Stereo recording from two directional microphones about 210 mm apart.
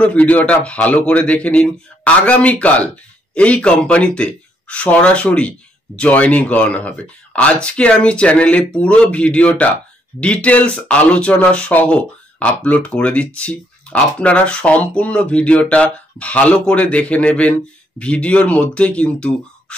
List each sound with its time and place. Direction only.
0.0 s a man's voice: 5° left (ahead or behind)